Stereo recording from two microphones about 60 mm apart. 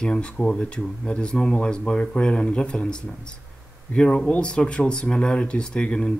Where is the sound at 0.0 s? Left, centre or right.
Centre.